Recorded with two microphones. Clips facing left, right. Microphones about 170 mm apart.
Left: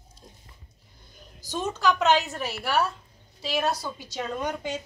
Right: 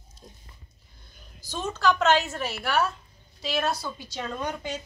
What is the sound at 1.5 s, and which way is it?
A woman's voice, 15° left (ahead or behind).